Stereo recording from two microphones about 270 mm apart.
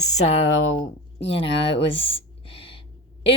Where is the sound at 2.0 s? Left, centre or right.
Centre.